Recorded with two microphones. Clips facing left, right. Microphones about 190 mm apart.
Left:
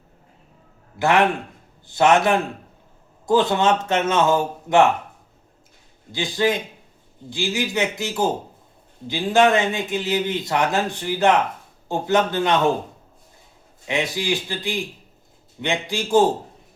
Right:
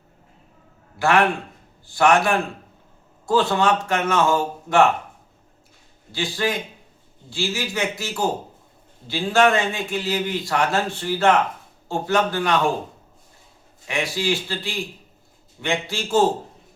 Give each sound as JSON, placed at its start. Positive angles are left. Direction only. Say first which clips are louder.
{"t": 0.9, "sound": "speech", "louder": "left 1 dB", "side_deg": 20}
{"t": 6.1, "sound": "speech", "louder": "left 3 dB", "side_deg": 20}
{"t": 13.8, "sound": "speech", "louder": "even", "side_deg": 20}